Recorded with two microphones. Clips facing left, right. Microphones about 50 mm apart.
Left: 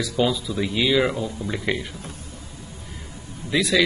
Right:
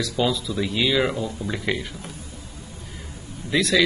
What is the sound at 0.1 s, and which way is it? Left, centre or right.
A man's voice, centre.